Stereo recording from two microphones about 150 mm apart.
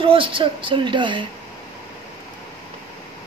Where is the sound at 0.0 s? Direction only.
35° right (ahead or behind).